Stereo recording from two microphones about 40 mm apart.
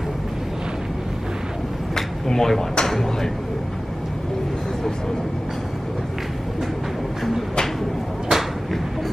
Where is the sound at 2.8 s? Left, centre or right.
Centre.